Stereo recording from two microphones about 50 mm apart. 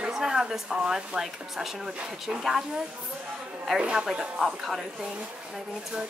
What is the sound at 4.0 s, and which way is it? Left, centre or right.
Speech, centre.